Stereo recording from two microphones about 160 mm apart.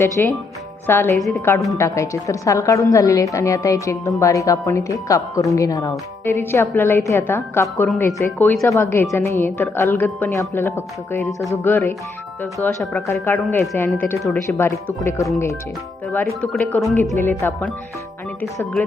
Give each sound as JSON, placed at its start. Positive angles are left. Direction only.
{"t": 0.2, "sound": "a woman's voice", "side_deg": 10}